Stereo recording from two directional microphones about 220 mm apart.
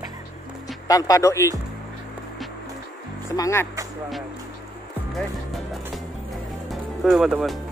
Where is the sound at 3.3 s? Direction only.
15° left (ahead or behind).